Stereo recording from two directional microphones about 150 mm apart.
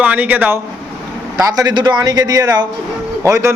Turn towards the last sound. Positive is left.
turn(degrees=-20)  # may be behind; listen again after turning